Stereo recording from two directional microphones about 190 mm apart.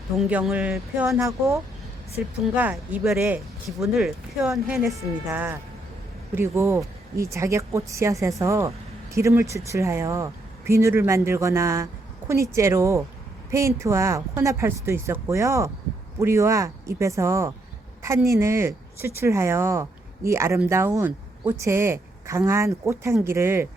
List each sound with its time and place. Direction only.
0.2 s speech: 5° right (ahead or behind)